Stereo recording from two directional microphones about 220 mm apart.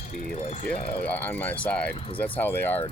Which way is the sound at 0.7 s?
25° left (ahead or behind).